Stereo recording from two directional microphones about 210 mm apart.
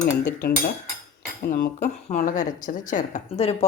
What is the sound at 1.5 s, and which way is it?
Speech, 50° left (ahead or behind).